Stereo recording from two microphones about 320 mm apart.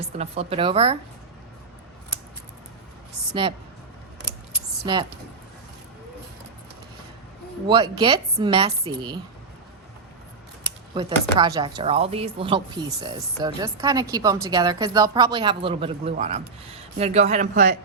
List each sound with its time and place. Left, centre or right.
0.2 s speech: centre
7.7 s speech: centre
10.9 s a man's voice: centre; by 17.7 s right